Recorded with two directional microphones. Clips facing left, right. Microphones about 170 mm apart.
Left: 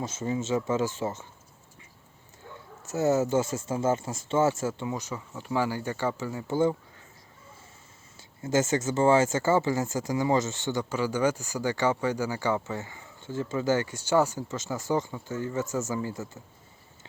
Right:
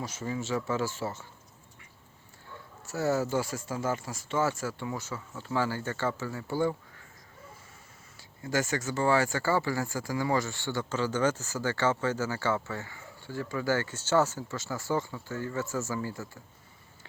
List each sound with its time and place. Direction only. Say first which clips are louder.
0.0 s speech: left 4 dB; 25° left (ahead or behind)
2.8 s speech: left 4 dB; 20° left (ahead or behind)
8.4 s speech: left 5 dB; 25° left (ahead or behind)